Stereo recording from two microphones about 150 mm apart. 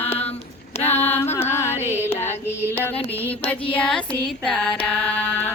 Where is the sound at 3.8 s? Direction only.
5° left (ahead or behind).